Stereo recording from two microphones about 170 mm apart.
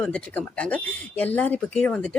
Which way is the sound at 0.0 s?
5° left (ahead or behind).